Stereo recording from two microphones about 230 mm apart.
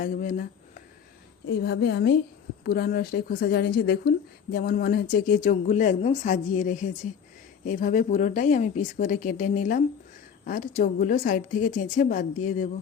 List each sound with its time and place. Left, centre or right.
0.0 s a woman's voice: left